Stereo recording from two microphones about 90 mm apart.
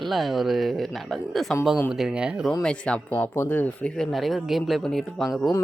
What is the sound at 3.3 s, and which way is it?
Speech, 25° left (ahead or behind).